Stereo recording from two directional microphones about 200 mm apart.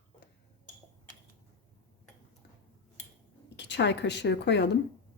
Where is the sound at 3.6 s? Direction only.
60° left (ahead or behind).